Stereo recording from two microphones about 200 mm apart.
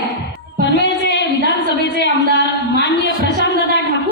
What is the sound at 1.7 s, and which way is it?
A woman's voice, 60° left (ahead or behind).